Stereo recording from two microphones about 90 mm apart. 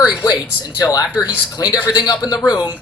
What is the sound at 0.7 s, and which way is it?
A man's voice, 45° left (ahead or behind).